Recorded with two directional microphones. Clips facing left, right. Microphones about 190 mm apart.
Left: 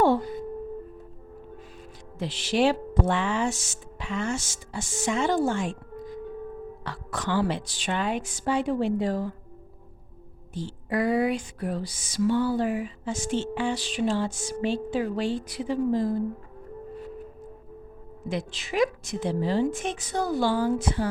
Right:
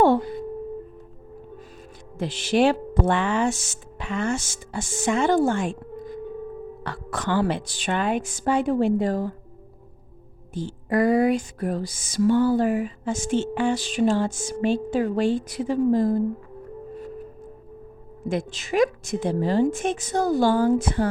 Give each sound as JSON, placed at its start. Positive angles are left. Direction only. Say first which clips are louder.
{"t": 2.1, "sound": "music", "louder": "right 4 dB", "side_deg": -50}
{"t": 6.8, "sound": "music", "louder": "right 3 dB", "side_deg": -55}
{"t": 10.5, "sound": "music", "louder": "right 5 dB", "side_deg": -50}
{"t": 18.3, "sound": "music", "louder": "right 5 dB", "side_deg": -45}